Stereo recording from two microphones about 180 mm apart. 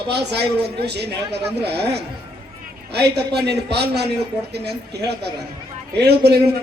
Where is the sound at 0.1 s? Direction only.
65° right (ahead or behind).